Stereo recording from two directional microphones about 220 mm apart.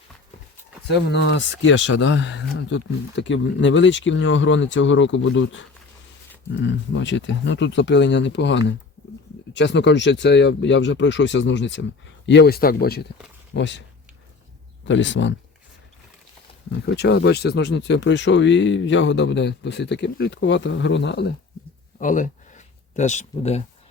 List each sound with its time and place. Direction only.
0.9 s speech: 50° left (ahead or behind)
14.8 s speech: 55° left (ahead or behind)
16.8 s speech: 50° left (ahead or behind)
21.9 s a sound: 35° left (ahead or behind)